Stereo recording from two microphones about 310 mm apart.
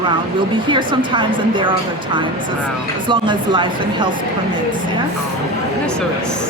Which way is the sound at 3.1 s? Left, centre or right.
Centre.